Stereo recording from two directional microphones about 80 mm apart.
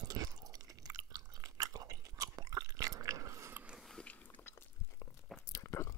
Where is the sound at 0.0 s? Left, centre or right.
Right.